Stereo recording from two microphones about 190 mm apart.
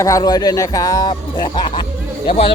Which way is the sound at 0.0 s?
20° left (ahead or behind).